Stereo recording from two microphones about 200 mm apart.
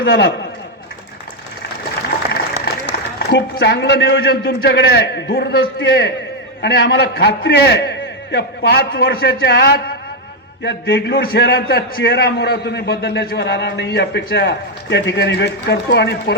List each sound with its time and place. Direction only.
0.0 s a man's voice: 65° left (ahead or behind)
3.2 s a man's voice: 55° left (ahead or behind)